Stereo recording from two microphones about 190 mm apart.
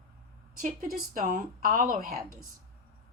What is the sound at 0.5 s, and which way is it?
Speech, 45° right (ahead or behind).